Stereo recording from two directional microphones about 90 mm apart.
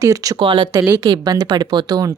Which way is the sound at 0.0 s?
40° right (ahead or behind).